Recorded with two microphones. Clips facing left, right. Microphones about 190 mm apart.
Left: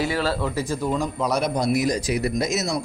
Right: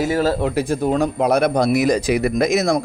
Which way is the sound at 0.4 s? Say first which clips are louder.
Right 6 dB; 60° right (ahead or behind).